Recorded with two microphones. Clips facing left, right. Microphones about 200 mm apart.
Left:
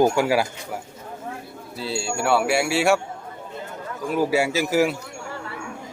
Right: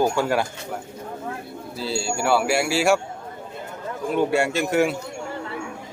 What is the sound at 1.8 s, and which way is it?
A man's voice, centre (ahead or behind).